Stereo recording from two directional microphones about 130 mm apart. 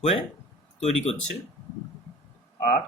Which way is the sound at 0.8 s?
55° left (ahead or behind).